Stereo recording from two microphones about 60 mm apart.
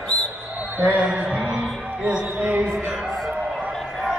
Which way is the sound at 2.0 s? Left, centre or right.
Right.